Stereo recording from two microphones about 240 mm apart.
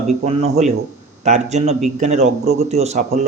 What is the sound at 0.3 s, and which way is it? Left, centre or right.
A man's voice, right.